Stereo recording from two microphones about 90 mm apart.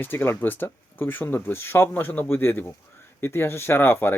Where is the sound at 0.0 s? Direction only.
25° left (ahead or behind).